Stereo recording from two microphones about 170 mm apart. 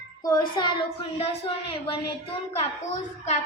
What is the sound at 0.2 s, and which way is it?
Child singing, 20° left (ahead or behind).